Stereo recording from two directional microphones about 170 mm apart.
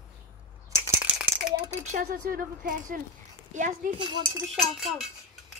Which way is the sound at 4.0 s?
30° right (ahead or behind).